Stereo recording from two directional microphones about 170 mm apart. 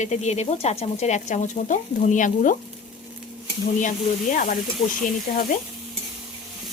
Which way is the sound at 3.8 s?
50° left (ahead or behind).